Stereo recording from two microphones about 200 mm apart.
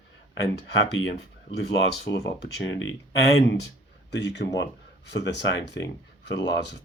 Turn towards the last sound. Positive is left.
turn(degrees=60)  # may be behind; listen again after turning